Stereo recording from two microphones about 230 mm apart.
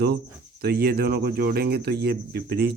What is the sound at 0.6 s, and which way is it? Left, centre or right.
Speech, right.